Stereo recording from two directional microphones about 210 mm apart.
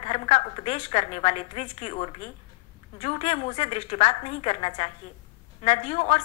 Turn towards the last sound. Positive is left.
turn(degrees=30)  # may be behind; listen again after turning